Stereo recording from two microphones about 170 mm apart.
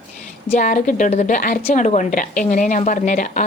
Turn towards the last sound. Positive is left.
turn(degrees=50)  # may be behind; listen again after turning